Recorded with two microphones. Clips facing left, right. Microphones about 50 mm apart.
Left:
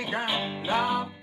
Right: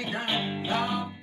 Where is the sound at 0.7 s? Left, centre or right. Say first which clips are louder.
Left 4 dB; centre.